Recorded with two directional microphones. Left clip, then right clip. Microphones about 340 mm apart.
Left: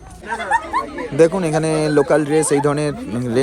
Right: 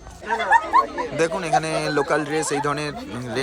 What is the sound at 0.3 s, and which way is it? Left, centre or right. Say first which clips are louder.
Speech: right 1 dB; right.